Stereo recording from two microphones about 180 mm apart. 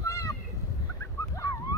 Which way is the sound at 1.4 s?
20° left (ahead or behind).